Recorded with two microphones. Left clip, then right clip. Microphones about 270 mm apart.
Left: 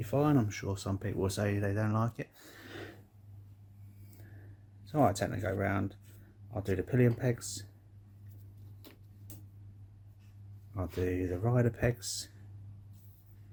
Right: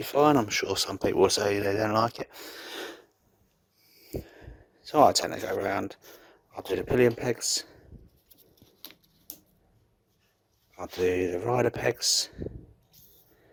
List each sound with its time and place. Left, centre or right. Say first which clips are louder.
0.0 s speech: right 8 dB; right
4.9 s speech: right 9 dB; right
10.8 s speech: right 8 dB; right